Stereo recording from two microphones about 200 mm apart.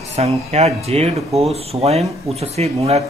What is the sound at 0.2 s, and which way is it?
Speech, 30° right (ahead or behind).